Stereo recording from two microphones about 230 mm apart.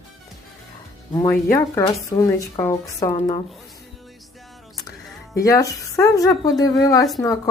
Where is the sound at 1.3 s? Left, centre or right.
Centre.